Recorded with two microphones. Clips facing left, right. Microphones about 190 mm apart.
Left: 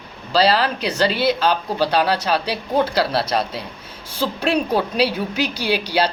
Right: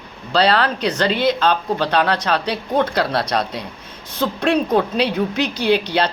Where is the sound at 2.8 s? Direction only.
30° left (ahead or behind).